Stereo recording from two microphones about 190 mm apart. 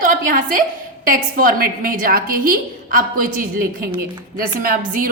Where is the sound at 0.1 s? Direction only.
45° right (ahead or behind).